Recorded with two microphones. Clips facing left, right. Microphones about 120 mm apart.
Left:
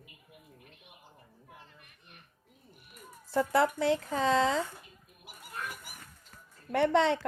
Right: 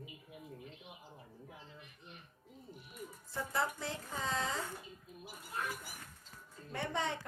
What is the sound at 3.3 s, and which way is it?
Speech, 75° left (ahead or behind).